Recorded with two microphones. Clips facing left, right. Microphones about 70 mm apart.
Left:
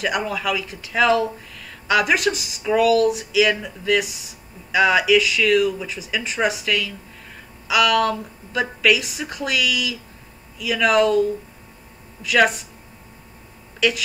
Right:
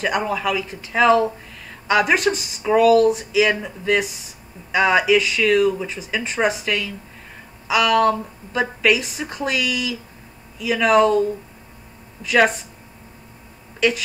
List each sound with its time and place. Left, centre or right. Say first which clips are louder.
0.2 s a woman's voice: right 2 dB; centre; by 3.2 s right
3.3 s a woman's voice: right 1 dB; right
13.7 s speech: right 1 dB; right